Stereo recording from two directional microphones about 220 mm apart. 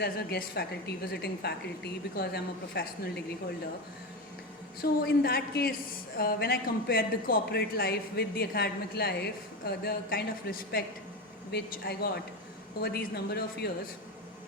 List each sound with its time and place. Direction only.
0.0 s speech: 45° left (ahead or behind)
4.8 s speech: 45° left (ahead or behind)